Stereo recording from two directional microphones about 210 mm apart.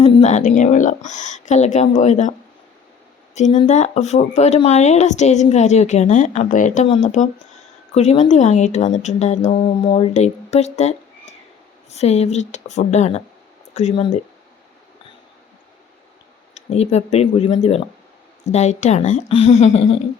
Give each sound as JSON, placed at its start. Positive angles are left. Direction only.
{"t": 0.0, "sound": "speech", "side_deg": 35}
{"t": 3.3, "sound": "speech", "side_deg": 35}
{"t": 16.6, "sound": "speech", "side_deg": 30}